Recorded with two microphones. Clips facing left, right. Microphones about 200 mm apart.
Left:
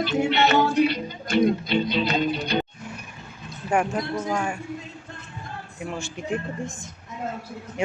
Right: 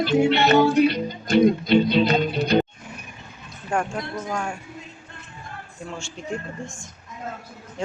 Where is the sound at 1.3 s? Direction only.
45° right (ahead or behind).